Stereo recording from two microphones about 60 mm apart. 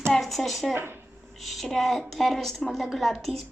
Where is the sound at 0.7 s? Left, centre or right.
Right.